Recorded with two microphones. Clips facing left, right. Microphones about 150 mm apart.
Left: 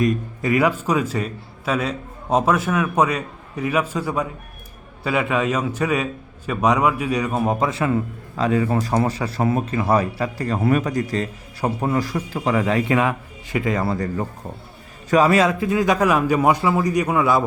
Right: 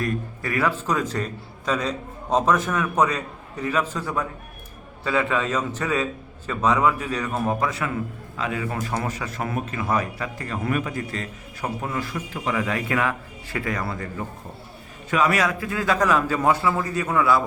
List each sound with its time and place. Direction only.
0.0 s a man's voice: 20° left (ahead or behind)